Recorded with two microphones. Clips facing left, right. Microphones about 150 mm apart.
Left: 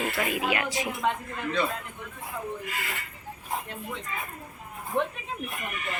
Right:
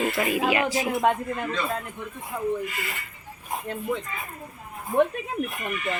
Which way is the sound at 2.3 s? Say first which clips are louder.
Right 7 dB; 50° right (ahead or behind).